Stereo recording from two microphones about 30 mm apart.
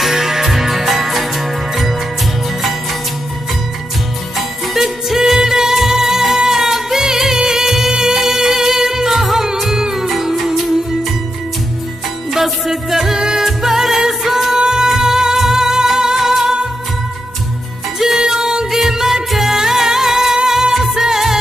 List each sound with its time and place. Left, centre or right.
0.0 s music: centre
4.7 s music: centre
12.3 s music: centre
14.6 s music: right
17.9 s music: centre